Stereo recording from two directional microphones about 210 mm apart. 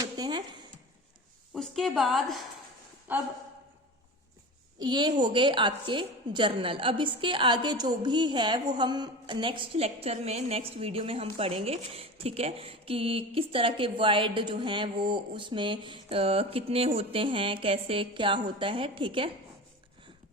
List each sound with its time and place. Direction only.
0.0 s a sound: 20° right (ahead or behind)
1.5 s a woman's voice: centre (ahead or behind)
4.8 s a woman's voice: 20° right (ahead or behind)